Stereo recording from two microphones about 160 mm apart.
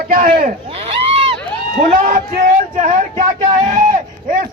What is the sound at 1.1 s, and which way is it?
Crowd, 35° right (ahead or behind).